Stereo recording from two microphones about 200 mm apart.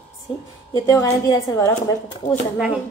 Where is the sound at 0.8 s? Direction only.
15° left (ahead or behind).